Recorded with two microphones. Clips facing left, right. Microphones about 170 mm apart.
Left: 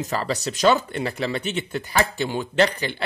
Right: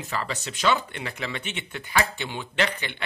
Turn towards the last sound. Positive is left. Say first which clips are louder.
# left 7 dB
turn(degrees=35)  # may be behind; listen again after turning